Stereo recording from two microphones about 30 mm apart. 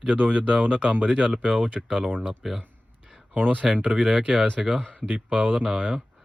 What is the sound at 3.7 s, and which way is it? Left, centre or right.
Speech, right.